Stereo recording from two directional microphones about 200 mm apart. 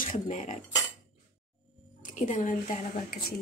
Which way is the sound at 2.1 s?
40° left (ahead or behind).